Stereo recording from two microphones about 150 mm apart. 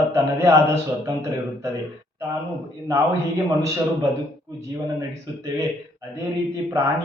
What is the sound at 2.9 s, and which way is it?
Speech, 20° right (ahead or behind).